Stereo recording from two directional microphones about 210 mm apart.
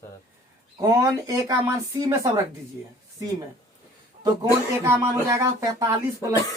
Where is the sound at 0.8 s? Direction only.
15° right (ahead or behind).